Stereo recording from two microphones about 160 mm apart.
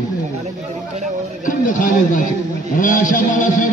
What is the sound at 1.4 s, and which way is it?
A man's voice, 55° left (ahead or behind).